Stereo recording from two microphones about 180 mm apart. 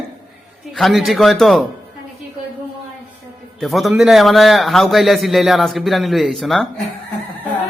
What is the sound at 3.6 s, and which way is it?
A man's voice, centre (ahead or behind).